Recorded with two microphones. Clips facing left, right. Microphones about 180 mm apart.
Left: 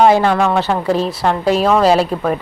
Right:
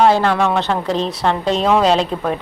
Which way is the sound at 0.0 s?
10° left (ahead or behind).